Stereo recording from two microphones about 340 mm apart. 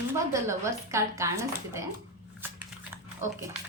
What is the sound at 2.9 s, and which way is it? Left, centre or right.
Dog, centre.